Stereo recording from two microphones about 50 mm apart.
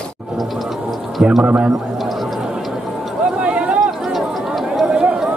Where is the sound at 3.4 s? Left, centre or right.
Right.